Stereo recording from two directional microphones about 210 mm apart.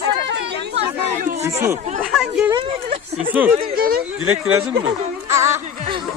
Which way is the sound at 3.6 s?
45° right (ahead or behind).